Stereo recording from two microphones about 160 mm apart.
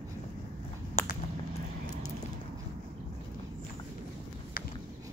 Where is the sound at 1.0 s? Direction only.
45° left (ahead or behind).